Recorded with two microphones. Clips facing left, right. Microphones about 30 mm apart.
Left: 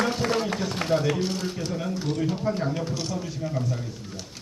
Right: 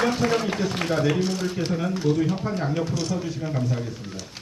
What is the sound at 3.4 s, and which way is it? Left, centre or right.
Speech, centre.